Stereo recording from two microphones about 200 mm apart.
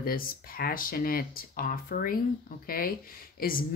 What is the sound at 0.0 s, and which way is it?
Speech, 45° left (ahead or behind).